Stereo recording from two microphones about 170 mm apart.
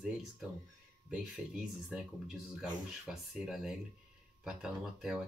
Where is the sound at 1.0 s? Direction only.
5° right (ahead or behind).